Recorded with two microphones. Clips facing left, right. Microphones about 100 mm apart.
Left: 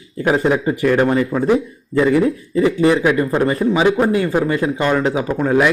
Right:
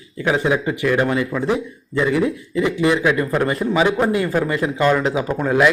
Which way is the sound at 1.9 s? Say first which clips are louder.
Left 5 dB; 55° left (ahead or behind).